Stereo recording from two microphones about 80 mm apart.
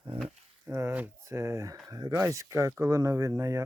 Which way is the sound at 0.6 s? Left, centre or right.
Right.